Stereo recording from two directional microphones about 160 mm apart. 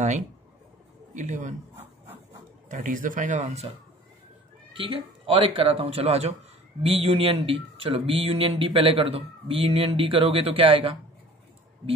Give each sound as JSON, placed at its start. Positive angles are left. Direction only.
{"t": 1.1, "sound": "speech", "side_deg": -50}
{"t": 2.7, "sound": "speech", "side_deg": -55}
{"t": 4.7, "sound": "speech", "side_deg": -35}